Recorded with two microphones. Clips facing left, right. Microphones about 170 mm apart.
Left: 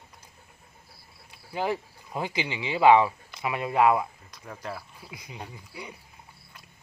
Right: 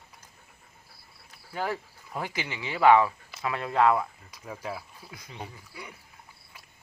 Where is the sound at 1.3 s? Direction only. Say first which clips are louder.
Left 3 dB; 20° left (ahead or behind).